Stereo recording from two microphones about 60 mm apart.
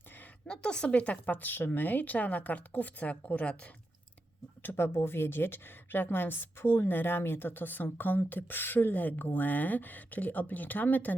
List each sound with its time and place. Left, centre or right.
0.4 s a woman's voice: centre
4.6 s a woman's voice: left